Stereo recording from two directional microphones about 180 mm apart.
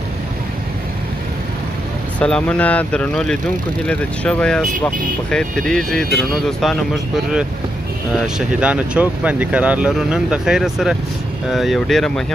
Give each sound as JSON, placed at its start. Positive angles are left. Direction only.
{"t": 2.1, "sound": "speech", "side_deg": 5}
{"t": 8.4, "sound": "speech", "side_deg": -5}